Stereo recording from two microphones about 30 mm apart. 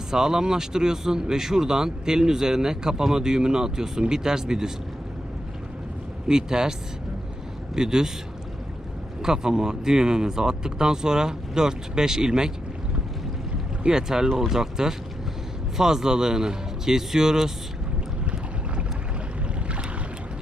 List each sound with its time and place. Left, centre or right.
0.1 s speech: centre
6.2 s speech: right
7.8 s speech: right
9.2 s speech: right
14.1 s speech: centre